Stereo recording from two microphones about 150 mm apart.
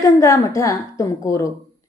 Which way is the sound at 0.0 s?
20° left (ahead or behind).